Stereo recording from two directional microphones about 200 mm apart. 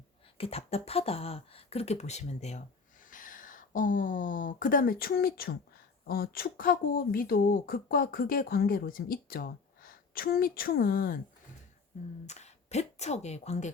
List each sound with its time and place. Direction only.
0.3 s speech: 30° left (ahead or behind); by 11.2 s 45° left (ahead or behind)
12.2 s speech: 35° left (ahead or behind)